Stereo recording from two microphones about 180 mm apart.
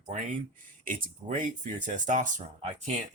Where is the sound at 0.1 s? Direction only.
40° right (ahead or behind).